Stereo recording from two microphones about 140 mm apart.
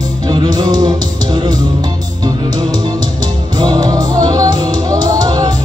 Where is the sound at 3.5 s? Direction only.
30° right (ahead or behind).